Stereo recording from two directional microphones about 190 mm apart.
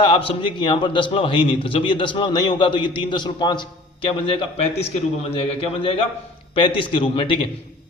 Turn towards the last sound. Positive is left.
turn(degrees=25)  # may be behind; listen again after turning